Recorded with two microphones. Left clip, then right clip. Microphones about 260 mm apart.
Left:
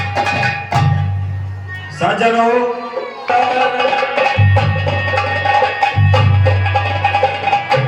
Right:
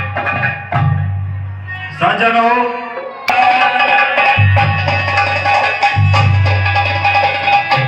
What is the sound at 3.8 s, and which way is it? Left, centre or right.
Music, centre.